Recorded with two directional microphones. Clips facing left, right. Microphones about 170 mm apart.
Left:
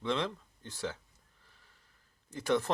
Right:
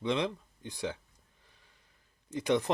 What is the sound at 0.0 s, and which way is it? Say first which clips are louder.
Speech: right 2 dB; 15° right (ahead or behind).